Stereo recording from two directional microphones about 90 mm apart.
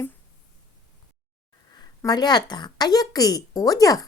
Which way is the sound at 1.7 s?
45° left (ahead or behind).